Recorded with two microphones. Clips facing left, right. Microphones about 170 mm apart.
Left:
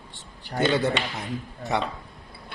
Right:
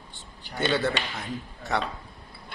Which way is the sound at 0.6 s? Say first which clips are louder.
Left 3 dB; 20° left (ahead or behind).